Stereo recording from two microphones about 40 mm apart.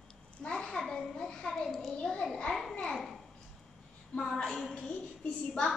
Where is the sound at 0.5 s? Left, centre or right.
Centre.